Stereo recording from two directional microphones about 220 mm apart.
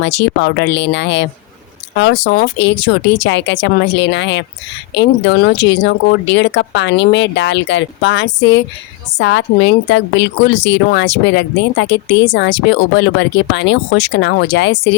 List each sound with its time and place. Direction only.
0.0 s a woman's voice: 50° left (ahead or behind)